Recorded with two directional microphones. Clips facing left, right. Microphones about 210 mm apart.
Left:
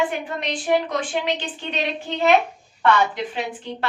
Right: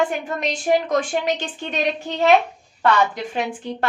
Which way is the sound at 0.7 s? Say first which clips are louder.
Right 1 dB; 45° right (ahead or behind).